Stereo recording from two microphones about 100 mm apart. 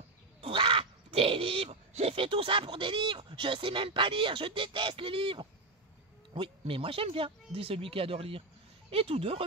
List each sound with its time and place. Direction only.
0.4 s speech: 60° right (ahead or behind)
6.6 s speech: 70° right (ahead or behind)